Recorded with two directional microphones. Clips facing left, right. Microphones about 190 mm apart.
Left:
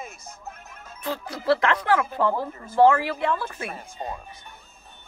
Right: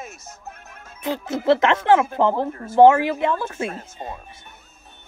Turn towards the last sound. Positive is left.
turn(degrees=-25)  # may be behind; listen again after turning